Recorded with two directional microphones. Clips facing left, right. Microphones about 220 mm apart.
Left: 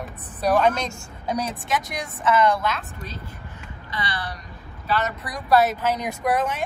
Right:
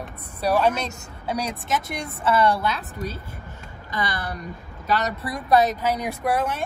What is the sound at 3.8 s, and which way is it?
A woman's voice, 45° right (ahead or behind).